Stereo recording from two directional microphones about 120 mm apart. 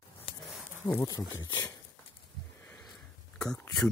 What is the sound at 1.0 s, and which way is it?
Speech, 35° left (ahead or behind).